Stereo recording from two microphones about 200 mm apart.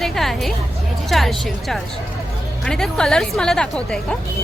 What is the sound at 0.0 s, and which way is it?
Music, centre (ahead or behind).